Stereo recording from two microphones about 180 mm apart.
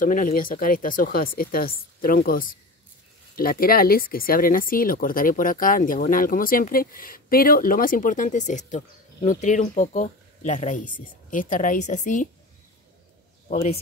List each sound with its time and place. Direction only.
0.0 s speech: 50° left (ahead or behind)
13.5 s a man's voice: 35° left (ahead or behind)